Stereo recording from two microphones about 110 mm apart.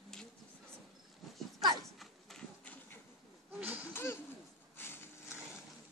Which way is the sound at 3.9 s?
20° left (ahead or behind).